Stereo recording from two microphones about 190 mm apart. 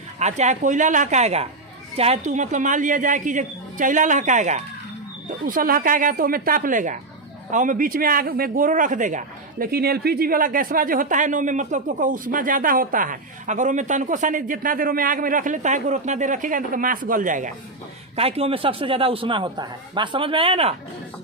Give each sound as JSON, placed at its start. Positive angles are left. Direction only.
{"t": 0.2, "sound": "a woman's voice", "side_deg": -35}
{"t": 18.2, "sound": "a man's voice", "side_deg": -30}